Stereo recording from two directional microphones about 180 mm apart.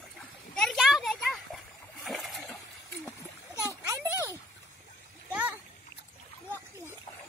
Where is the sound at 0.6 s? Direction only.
Centre (ahead or behind).